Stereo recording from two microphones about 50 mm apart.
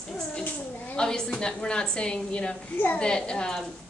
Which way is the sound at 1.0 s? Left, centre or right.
Centre.